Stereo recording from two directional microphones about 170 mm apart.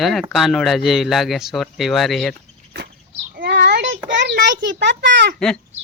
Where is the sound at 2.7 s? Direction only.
80° right.